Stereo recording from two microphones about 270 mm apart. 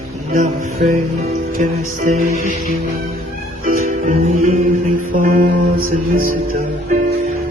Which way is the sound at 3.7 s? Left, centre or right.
Right.